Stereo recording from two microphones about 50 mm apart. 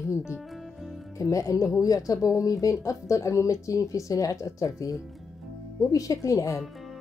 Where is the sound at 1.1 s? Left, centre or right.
Left.